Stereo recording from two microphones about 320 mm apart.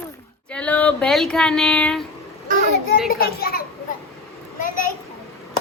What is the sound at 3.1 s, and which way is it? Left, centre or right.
Speech, left.